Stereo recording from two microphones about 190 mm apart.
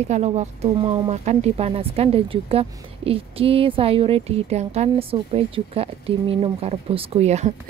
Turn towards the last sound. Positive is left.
turn(degrees=-35)  # may be behind; listen again after turning